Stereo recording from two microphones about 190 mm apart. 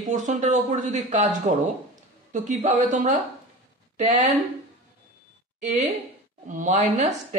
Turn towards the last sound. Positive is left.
turn(degrees=-35)  # may be behind; listen again after turning